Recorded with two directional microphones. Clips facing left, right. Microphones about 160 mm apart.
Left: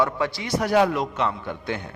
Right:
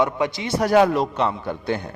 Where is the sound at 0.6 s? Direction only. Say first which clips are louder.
Right 3 dB; 45° right (ahead or behind).